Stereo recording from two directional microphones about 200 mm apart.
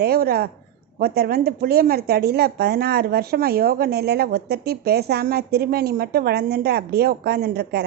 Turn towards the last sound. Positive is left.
turn(degrees=-55)  # may be behind; listen again after turning